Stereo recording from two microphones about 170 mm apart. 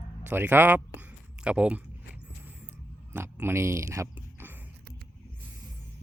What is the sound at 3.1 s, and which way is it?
Speech, 15° right (ahead or behind).